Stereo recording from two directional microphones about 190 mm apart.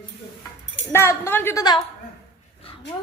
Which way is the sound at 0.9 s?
15° left (ahead or behind).